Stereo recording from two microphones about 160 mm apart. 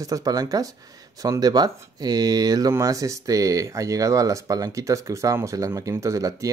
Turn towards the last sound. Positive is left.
turn(degrees=-20)  # may be behind; listen again after turning